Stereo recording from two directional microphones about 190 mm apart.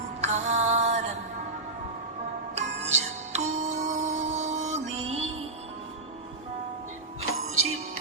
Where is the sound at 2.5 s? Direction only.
35° right (ahead or behind).